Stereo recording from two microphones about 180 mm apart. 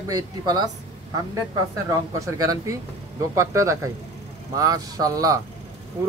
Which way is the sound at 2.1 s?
20° right (ahead or behind).